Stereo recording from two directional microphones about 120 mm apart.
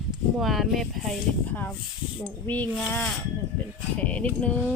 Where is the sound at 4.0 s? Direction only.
10° left (ahead or behind).